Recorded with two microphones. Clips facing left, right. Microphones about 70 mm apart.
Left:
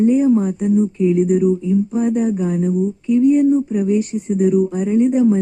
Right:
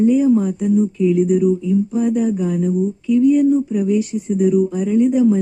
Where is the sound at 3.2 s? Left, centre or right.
Left.